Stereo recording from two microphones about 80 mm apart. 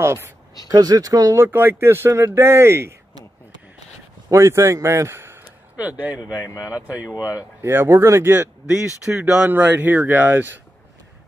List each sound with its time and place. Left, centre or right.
0.0 s speech: right
0.7 s speech: right
1.3 s speech: right
4.3 s a man's voice: right
5.8 s speech: centre
8.6 s speech: centre